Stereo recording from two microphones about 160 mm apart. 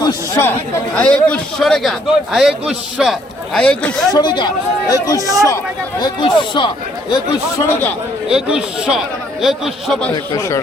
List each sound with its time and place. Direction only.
0.0 s chatter: 15° left (ahead or behind)
0.9 s speech: 5° left (ahead or behind)
4.1 s speech: 25° left (ahead or behind)
5.2 s speech: 20° right (ahead or behind)
6.0 s a man's voice: 30° left (ahead or behind); by 7.9 s 15° left (ahead or behind)
8.3 s speech: 5° right (ahead or behind)